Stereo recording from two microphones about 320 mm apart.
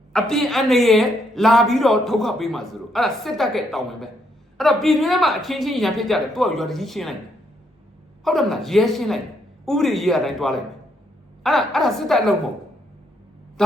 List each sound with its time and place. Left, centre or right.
0.1 s a man's voice: centre
8.2 s a man's voice: centre
13.6 s a sound: centre